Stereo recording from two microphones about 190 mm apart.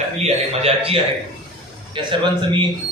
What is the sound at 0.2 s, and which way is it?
Speech, 30° right (ahead or behind).